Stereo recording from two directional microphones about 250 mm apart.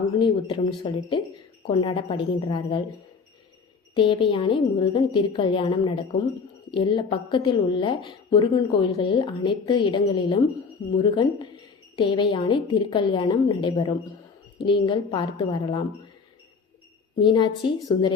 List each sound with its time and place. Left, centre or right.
0.2 s a woman's voice: centre
4.2 s a woman's voice: centre
17.2 s a woman's voice: centre